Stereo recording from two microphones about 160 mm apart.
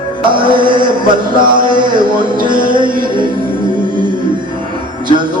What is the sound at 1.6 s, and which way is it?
Speech, 30° right (ahead or behind).